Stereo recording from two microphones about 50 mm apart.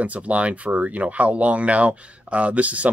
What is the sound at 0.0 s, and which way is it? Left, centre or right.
Speech, right.